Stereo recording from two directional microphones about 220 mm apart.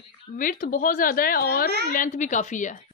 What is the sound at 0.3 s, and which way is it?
A woman's voice, 35° left (ahead or behind).